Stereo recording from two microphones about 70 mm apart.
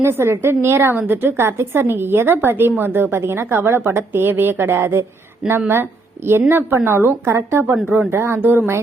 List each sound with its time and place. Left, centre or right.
0.0 s a woman's voice: right